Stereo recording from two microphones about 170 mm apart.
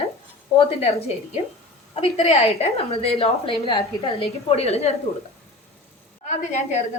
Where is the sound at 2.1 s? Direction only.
35° left (ahead or behind).